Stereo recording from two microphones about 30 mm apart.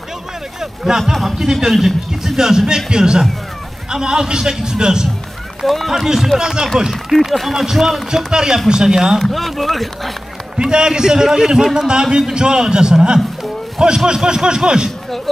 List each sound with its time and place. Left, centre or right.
0.6 s a man's voice: centre
5.9 s a man's voice: centre
6.9 s speech: centre
8.3 s a man's voice: right
9.3 s speech: centre
10.6 s a man's voice: right